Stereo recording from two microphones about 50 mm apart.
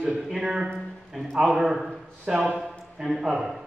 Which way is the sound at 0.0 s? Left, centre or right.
Centre.